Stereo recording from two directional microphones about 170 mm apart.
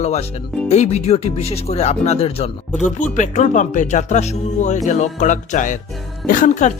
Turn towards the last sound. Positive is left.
turn(degrees=50)  # may be behind; listen again after turning